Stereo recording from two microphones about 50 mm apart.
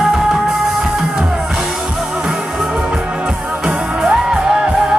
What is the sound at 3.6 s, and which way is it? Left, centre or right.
Music, centre.